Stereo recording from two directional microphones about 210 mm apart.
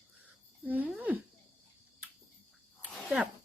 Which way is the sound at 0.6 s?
5° right (ahead or behind).